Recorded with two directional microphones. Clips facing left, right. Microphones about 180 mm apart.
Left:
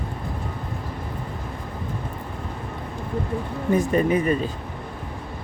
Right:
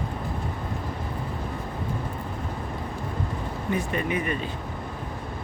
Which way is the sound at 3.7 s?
40° left (ahead or behind).